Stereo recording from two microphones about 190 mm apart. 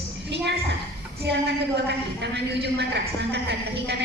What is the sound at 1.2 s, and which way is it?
A man's voice, 60° right (ahead or behind).